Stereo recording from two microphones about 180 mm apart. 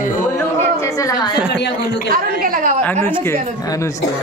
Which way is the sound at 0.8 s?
15° left (ahead or behind).